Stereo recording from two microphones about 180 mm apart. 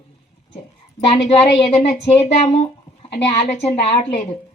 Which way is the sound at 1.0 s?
35° left (ahead or behind).